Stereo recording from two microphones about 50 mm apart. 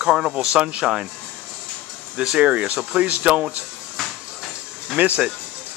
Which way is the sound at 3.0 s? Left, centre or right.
Right.